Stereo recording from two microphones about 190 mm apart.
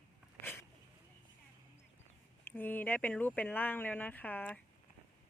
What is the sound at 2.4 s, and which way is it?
Speech, 10° left (ahead or behind).